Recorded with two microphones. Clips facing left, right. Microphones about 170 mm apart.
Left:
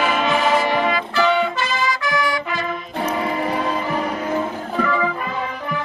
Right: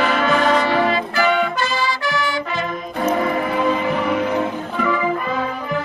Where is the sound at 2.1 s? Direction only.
25° right (ahead or behind).